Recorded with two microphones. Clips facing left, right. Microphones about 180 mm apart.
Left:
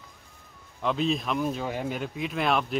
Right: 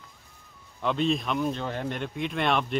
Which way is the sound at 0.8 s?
Centre (ahead or behind).